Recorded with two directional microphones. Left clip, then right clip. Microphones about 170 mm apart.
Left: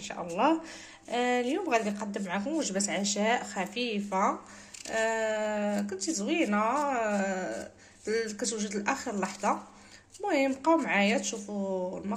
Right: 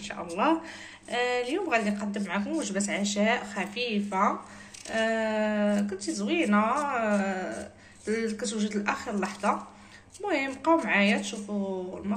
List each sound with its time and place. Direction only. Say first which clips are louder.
0.0 s speech: even; 50° left (ahead or behind)